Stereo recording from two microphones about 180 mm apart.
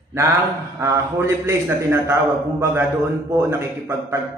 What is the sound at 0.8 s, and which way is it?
Speech, 15° right (ahead or behind).